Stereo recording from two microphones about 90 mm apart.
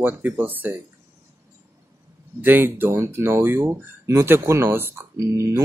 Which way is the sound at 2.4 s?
20° right (ahead or behind).